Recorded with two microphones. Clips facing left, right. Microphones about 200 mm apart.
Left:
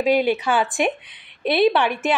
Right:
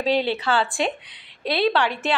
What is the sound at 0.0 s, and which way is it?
A woman's voice, 10° left (ahead or behind).